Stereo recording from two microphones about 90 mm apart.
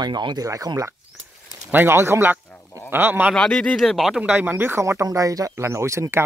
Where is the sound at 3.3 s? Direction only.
10° left (ahead or behind).